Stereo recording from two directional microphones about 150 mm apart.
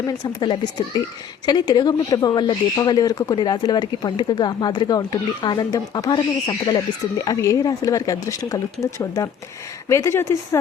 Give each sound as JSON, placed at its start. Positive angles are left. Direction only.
{"t": 0.0, "sound": "speech", "side_deg": 25}